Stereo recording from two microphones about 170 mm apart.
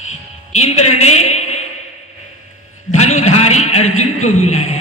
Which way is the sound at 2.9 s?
40° left (ahead or behind).